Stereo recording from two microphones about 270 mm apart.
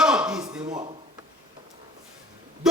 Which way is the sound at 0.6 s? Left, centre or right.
Centre.